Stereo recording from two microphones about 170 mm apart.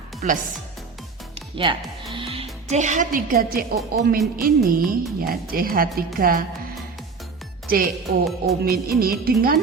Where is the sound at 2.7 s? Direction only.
45° right (ahead or behind).